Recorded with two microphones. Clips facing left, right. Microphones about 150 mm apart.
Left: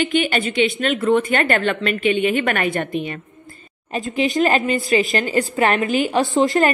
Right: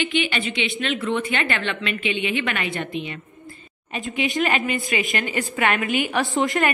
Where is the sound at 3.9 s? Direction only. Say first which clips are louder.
Left 5 dB; 35° left (ahead or behind).